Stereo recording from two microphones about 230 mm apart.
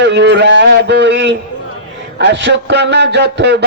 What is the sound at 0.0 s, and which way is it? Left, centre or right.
A man's voice, right.